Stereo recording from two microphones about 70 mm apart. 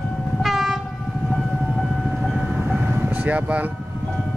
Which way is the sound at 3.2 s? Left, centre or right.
Right.